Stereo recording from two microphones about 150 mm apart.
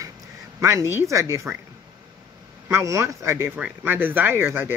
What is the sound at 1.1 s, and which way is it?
Speech, 20° right (ahead or behind).